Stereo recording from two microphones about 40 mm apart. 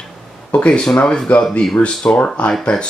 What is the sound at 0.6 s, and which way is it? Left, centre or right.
Speech, left.